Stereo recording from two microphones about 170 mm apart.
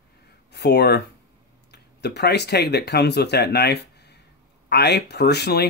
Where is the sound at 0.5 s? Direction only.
75° left (ahead or behind).